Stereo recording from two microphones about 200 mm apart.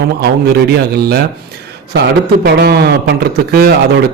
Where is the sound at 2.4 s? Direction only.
55° right (ahead or behind).